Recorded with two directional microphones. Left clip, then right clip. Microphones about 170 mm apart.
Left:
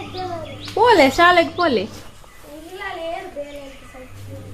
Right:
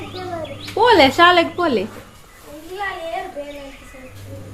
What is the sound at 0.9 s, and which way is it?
Speech, 30° left (ahead or behind).